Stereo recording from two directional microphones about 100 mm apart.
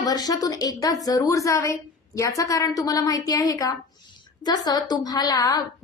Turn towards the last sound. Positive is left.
turn(degrees=40)  # may be behind; listen again after turning